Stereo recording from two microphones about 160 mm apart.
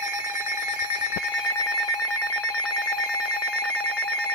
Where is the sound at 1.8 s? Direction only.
Centre (ahead or behind).